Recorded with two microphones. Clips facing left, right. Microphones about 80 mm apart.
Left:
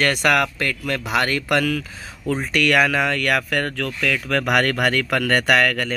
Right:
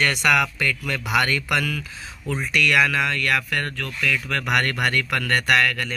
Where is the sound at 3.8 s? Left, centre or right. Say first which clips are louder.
Left 2 dB; left.